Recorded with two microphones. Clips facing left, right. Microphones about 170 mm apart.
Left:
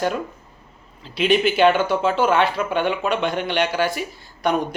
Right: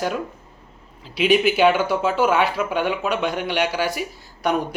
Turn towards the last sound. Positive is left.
turn(degrees=-10)  # may be behind; listen again after turning